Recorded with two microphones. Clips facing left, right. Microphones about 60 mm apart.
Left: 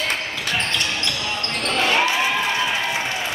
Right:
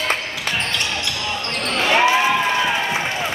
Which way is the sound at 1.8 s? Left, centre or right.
Right.